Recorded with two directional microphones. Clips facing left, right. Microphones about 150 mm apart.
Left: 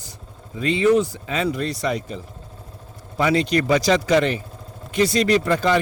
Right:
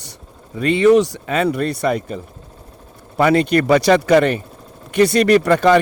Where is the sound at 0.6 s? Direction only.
65° right (ahead or behind).